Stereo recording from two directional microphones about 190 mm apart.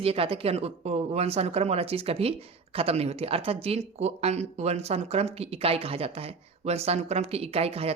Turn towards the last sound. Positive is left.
turn(degrees=-30)  # may be behind; listen again after turning